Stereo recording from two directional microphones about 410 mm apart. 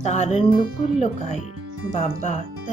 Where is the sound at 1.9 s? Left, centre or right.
Centre.